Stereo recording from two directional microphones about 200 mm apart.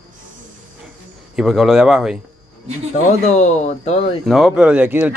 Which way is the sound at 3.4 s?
35° left (ahead or behind).